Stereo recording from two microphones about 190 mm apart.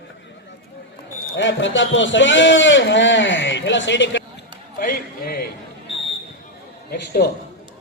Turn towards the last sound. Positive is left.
turn(degrees=60)  # may be behind; listen again after turning